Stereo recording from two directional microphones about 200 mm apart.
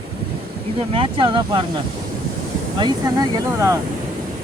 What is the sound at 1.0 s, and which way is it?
Speech, 25° right (ahead or behind).